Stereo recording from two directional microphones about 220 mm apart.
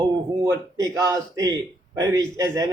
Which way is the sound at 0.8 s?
15° right (ahead or behind).